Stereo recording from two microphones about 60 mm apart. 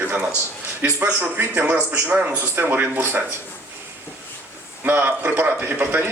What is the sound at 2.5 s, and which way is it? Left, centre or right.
Speech, right.